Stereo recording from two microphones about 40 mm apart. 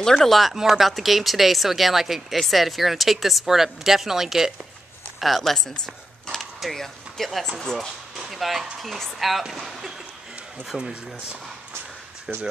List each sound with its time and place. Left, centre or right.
0.0 s speech: centre
0.4 s speech: centre
5.4 s speech: centre
8.3 s speech: centre
12.3 s speech: right